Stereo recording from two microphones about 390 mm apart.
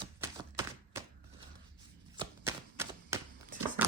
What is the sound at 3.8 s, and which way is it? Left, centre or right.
Patter, centre.